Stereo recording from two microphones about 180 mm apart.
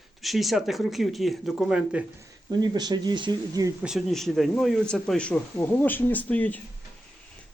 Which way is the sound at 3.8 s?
Centre (ahead or behind).